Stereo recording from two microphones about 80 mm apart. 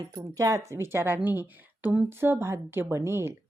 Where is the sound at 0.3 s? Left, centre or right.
Right.